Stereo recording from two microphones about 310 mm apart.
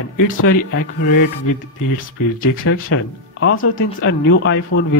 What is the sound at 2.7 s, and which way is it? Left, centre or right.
Speech, left.